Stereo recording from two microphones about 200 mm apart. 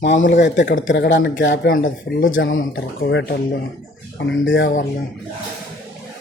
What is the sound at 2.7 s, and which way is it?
Speech, 60° left (ahead or behind).